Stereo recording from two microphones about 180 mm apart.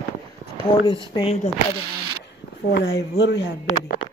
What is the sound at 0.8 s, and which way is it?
Speech, 25° left (ahead or behind).